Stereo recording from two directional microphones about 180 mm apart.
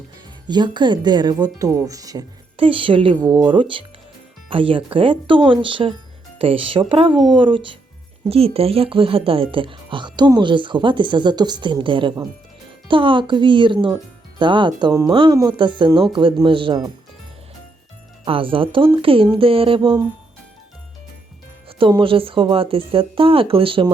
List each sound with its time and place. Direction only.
0.4 s speech: 25° right (ahead or behind)
18.3 s speech: 30° right (ahead or behind)
21.8 s speech: 30° right (ahead or behind)